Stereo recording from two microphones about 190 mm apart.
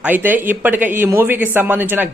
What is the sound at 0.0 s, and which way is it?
A man's voice, 10° right (ahead or behind).